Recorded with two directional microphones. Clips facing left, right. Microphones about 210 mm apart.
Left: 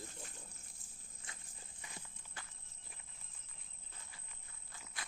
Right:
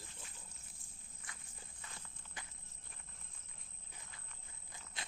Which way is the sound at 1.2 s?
25° left (ahead or behind).